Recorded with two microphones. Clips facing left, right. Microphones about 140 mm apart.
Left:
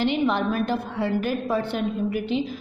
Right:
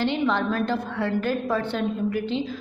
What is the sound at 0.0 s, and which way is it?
A woman's voice, 15° left (ahead or behind).